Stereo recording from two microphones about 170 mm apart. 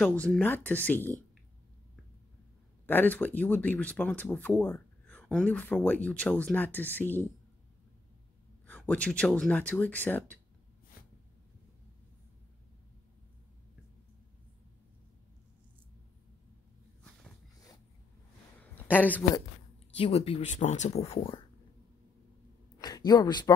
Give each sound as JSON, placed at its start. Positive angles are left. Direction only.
{"t": 0.0, "sound": "speech", "side_deg": 5}
{"t": 2.9, "sound": "speech", "side_deg": 10}
{"t": 8.6, "sound": "speech", "side_deg": 10}
{"t": 18.9, "sound": "speech", "side_deg": 10}
{"t": 20.0, "sound": "speech", "side_deg": 35}
{"t": 22.8, "sound": "a woman's voice", "side_deg": 20}